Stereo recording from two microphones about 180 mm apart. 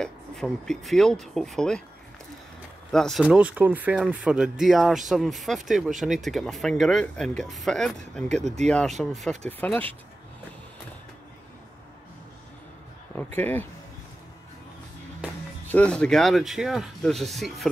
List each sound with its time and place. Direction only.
0.0 s speech: 5° left (ahead or behind)
2.9 s speech: centre (ahead or behind)
8.4 s speech: 40° right (ahead or behind)
8.6 s speech: 5° left (ahead or behind)
13.1 s speech: 10° left (ahead or behind)
15.7 s speech: 5° left (ahead or behind)